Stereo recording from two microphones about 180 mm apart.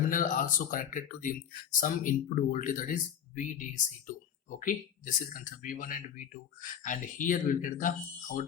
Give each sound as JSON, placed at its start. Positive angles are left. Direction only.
{"t": 0.1, "sound": "speech", "side_deg": 50}